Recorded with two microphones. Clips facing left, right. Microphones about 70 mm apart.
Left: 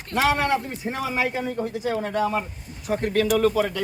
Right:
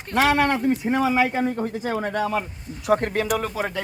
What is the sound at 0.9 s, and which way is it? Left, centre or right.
Speech, right.